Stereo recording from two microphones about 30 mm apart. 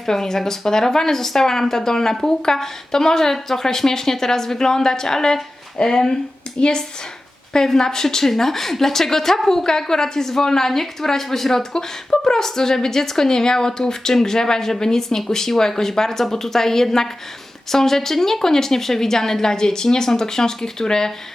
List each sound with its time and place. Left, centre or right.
0.0 s a woman's voice: centre
7.5 s a woman's voice: centre